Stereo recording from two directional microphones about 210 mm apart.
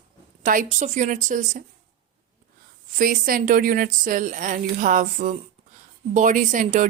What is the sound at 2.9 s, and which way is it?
Speech, 40° right (ahead or behind).